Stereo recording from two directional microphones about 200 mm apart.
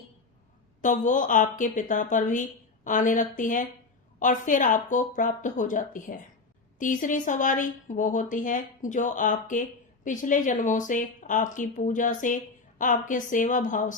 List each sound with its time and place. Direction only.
0.8 s speech: 40° left (ahead or behind)